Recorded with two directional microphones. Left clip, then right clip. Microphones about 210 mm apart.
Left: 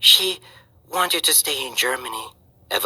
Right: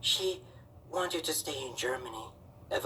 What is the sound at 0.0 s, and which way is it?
Speech, 50° left (ahead or behind).